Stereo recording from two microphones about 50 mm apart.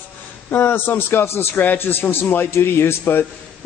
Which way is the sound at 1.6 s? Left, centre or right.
Left.